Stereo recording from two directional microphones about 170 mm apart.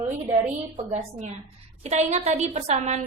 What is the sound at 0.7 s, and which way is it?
A woman's voice, 40° right (ahead or behind).